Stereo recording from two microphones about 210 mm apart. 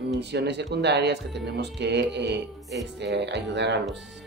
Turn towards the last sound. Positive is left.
turn(degrees=-55)  # may be behind; listen again after turning